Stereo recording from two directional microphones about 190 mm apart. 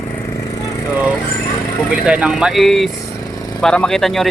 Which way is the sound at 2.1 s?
5° right (ahead or behind).